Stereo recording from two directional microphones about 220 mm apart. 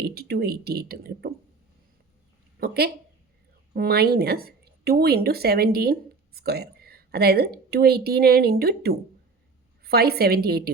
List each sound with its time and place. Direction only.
0.0 s speech: 45° right (ahead or behind)
2.6 s a sound: 45° right (ahead or behind)
3.8 s speech: 45° right (ahead or behind)